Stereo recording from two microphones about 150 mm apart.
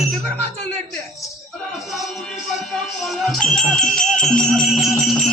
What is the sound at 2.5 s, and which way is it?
Music, centre (ahead or behind).